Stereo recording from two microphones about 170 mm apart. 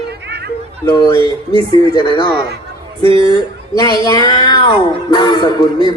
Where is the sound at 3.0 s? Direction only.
30° right (ahead or behind).